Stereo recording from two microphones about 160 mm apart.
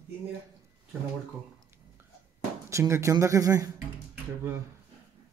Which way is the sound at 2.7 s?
20° right (ahead or behind).